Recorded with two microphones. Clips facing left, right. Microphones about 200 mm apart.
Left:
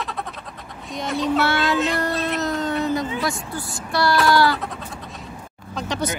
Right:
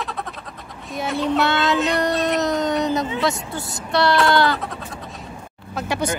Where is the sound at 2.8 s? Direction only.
20° right (ahead or behind).